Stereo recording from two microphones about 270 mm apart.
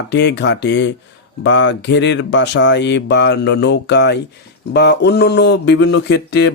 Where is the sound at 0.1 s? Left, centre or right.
Left.